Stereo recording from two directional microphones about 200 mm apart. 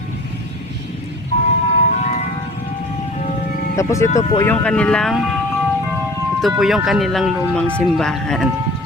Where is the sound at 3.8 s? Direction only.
15° left (ahead or behind).